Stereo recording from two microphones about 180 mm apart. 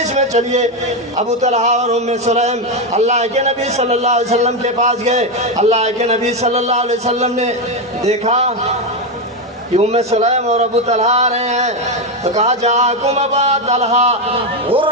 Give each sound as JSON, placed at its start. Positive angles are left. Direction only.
{"t": 0.2, "sound": "a man's voice", "side_deg": -40}
{"t": 9.7, "sound": "a man's voice", "side_deg": -35}